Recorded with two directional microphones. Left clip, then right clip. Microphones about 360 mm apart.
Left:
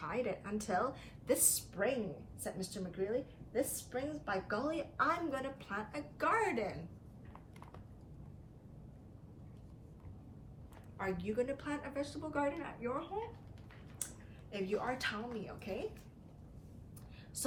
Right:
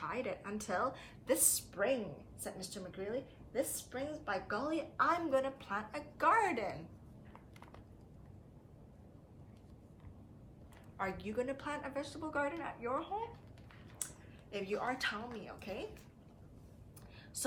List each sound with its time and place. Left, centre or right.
0.3 s a woman's voice: centre
10.9 s a woman's voice: centre
14.5 s a woman's voice: centre